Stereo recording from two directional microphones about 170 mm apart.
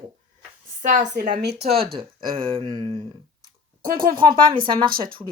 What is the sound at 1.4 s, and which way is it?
Speech, 75° right (ahead or behind).